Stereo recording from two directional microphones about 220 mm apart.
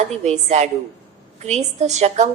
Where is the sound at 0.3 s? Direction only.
30° right (ahead or behind).